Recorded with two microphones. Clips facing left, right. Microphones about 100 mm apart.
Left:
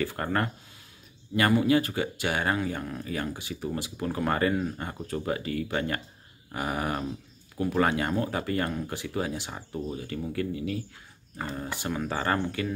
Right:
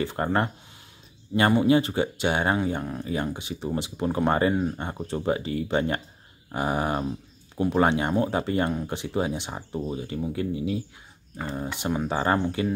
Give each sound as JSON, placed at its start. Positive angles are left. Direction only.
{"t": 0.0, "sound": "speech", "side_deg": -20}